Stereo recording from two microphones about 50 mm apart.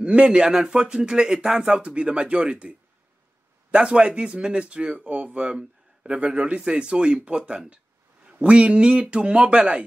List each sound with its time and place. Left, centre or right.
0.0 s speech: right
3.7 s speech: right